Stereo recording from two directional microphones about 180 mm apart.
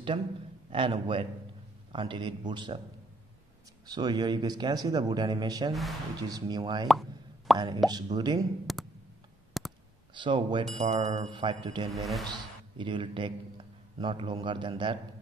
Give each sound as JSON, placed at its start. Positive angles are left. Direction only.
{"t": 0.7, "sound": "speech", "side_deg": -30}
{"t": 3.8, "sound": "speech", "side_deg": -20}
{"t": 5.7, "sound": "speech", "side_deg": 0}
{"t": 6.2, "sound": "speech", "side_deg": -20}
{"t": 6.9, "sound": "plop", "side_deg": 0}
{"t": 7.5, "sound": "speech", "side_deg": -25}
{"t": 8.7, "sound": "clicking", "side_deg": 0}
{"t": 10.1, "sound": "speech", "side_deg": -25}
{"t": 11.9, "sound": "speech", "side_deg": 0}
{"t": 12.3, "sound": "speech", "side_deg": -25}